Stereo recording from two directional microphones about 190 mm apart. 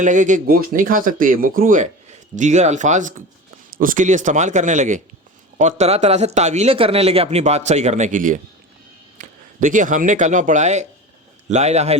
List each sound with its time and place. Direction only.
0.0 s a man's voice: 40° right (ahead or behind)